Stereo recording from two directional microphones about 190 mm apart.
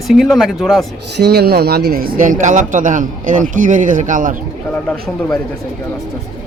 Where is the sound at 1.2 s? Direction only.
60° right (ahead or behind); by 4.3 s 45° right (ahead or behind).